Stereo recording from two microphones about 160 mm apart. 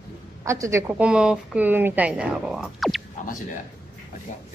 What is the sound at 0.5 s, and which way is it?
Speech, 20° right (ahead or behind).